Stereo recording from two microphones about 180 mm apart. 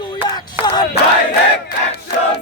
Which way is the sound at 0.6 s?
10° right (ahead or behind).